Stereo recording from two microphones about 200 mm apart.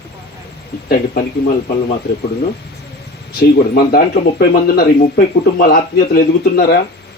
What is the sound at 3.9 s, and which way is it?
Speech, 50° left (ahead or behind).